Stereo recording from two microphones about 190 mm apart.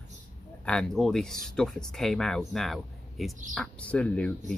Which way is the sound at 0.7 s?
5° left (ahead or behind).